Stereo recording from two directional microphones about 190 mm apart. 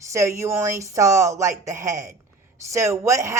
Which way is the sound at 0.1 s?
15° right (ahead or behind).